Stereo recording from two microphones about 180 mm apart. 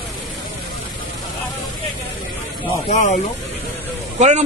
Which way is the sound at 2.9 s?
40° left (ahead or behind).